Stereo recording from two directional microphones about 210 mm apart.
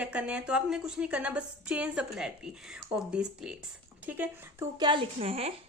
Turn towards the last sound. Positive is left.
turn(degrees=-30)  # may be behind; listen again after turning